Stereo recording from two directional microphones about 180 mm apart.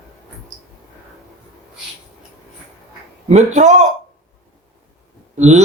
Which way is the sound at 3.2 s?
40° right (ahead or behind).